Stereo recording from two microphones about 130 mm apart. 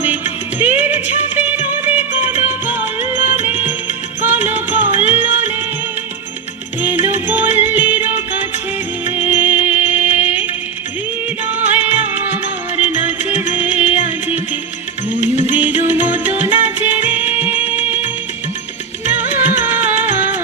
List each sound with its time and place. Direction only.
0.6 s music: 15° right (ahead or behind)
6.8 s music: 15° right (ahead or behind)
11.5 s music: 15° right (ahead or behind)
15.4 s music: 15° right (ahead or behind)
19.0 s music: 15° right (ahead or behind)